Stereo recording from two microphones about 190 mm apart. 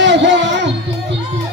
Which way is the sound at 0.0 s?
70° right (ahead or behind).